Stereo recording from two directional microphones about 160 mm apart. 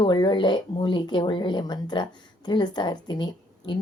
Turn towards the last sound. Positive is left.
turn(degrees=30)  # may be behind; listen again after turning